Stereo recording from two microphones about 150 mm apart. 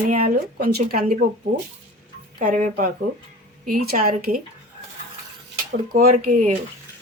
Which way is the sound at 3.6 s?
75° right (ahead or behind).